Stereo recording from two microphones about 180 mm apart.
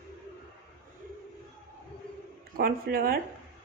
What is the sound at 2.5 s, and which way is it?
Speech, 55° right (ahead or behind).